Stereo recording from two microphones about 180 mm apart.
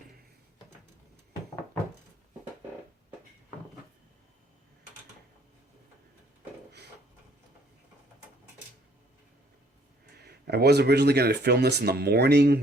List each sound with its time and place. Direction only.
10.2 s speech: 65° right (ahead or behind)